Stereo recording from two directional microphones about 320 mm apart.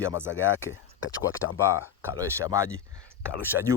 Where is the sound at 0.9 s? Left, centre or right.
Left.